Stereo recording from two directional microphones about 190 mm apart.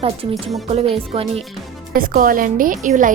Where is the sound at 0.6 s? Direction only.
30° right (ahead or behind).